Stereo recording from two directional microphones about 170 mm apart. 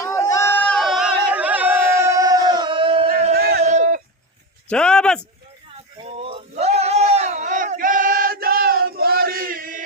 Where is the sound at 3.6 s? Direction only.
45° right (ahead or behind).